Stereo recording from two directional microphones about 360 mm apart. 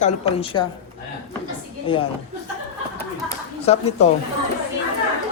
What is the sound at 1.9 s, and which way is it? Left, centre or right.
Speech, centre.